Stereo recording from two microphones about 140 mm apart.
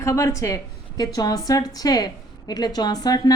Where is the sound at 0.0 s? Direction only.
20° left (ahead or behind).